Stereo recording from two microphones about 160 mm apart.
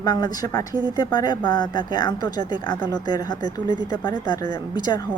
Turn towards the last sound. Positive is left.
turn(degrees=25)  # may be behind; listen again after turning